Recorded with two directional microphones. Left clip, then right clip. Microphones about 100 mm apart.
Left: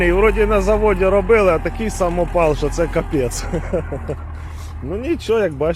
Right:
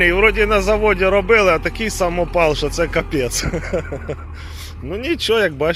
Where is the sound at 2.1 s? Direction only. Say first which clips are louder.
Even; 20° left (ahead or behind).